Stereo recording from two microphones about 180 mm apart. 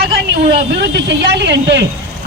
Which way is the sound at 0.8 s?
70° right (ahead or behind).